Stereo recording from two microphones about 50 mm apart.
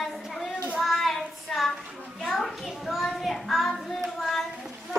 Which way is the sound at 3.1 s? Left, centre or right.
Centre.